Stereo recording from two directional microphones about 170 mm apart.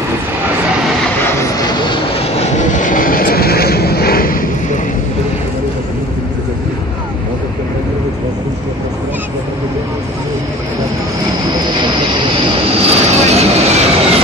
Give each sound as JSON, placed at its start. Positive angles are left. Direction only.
{"t": 1.7, "sound": "vehicle", "side_deg": 25}
{"t": 2.4, "sound": "vehicle", "side_deg": 45}
{"t": 12.8, "sound": "vehicle", "side_deg": -40}